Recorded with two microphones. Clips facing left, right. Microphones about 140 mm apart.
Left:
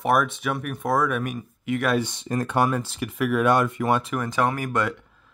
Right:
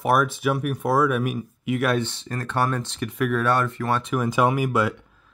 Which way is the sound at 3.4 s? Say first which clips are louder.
Left 2 dB; 15° left (ahead or behind).